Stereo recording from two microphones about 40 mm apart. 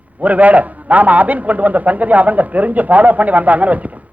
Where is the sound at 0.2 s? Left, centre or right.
Right.